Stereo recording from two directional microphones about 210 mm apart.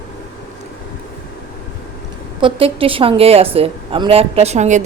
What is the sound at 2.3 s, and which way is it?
A woman's voice, 25° right (ahead or behind).